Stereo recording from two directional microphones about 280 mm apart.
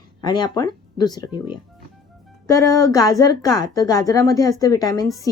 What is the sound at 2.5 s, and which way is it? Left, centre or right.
Speech, centre.